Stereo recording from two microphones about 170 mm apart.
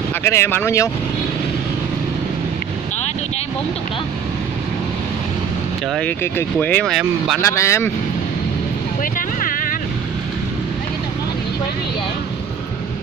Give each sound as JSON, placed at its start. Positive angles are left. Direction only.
{"t": 0.2, "sound": "speech", "side_deg": 15}
{"t": 5.9, "sound": "speech", "side_deg": 10}
{"t": 7.4, "sound": "speech", "side_deg": 15}
{"t": 9.4, "sound": "vehicle", "side_deg": 55}